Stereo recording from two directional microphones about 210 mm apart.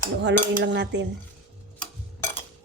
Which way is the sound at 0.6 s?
55° right (ahead or behind).